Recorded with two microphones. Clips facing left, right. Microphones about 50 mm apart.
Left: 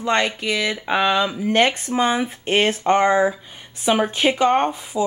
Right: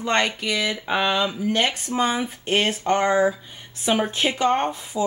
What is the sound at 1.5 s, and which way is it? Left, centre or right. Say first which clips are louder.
Speech: left 8 dB; left.